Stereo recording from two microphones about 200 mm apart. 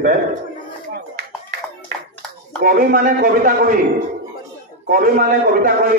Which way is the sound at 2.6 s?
45° right (ahead or behind).